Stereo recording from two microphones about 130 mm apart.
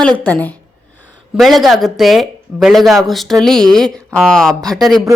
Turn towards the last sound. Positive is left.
turn(degrees=0)  # may be behind; listen again after turning